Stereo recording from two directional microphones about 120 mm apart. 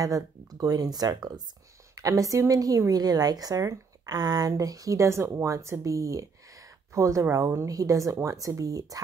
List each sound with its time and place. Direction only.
0.0 s a woman's voice: 30° right (ahead or behind)